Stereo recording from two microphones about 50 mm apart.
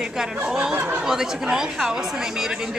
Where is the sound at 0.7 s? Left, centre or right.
Right.